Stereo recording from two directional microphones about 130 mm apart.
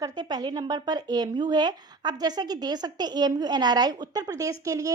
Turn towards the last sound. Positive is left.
turn(degrees=-25)  # may be behind; listen again after turning